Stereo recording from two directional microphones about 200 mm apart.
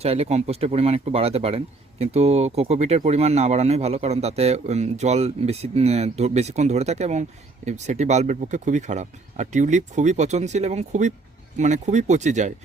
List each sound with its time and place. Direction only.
0.0 s speech: 30° right (ahead or behind)